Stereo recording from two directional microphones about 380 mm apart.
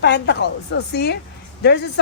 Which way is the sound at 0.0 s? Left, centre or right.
Left.